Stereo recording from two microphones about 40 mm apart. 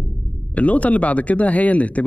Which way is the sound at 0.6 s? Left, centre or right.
Left.